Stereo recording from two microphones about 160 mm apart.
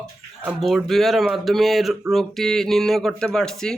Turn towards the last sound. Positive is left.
turn(degrees=5)  # may be behind; listen again after turning